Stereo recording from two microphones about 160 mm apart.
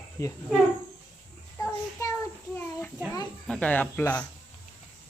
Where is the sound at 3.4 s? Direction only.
10° left (ahead or behind).